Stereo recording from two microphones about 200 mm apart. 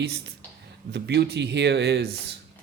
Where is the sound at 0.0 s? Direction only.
55° right (ahead or behind).